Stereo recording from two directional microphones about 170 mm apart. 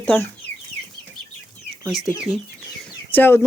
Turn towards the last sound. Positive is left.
turn(degrees=10)  # may be behind; listen again after turning